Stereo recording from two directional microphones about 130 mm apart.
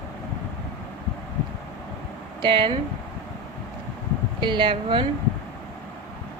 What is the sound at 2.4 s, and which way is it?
Speech, 40° right (ahead or behind).